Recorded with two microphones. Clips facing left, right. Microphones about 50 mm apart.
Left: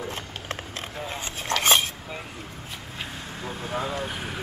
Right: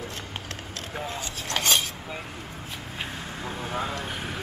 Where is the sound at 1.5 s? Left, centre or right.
Left.